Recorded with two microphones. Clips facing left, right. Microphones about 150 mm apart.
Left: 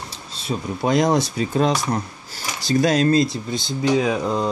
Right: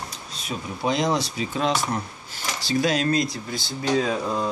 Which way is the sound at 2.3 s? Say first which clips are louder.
Left 4 dB; 40° left (ahead or behind).